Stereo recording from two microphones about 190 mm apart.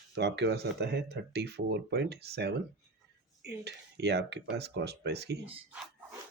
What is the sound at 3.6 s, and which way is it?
Speech, 60° right (ahead or behind).